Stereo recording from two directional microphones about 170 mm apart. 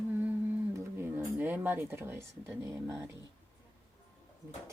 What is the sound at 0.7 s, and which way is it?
Mantra, 15° right (ahead or behind).